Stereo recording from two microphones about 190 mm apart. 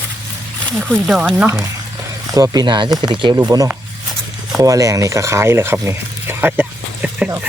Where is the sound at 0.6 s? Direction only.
Centre (ahead or behind).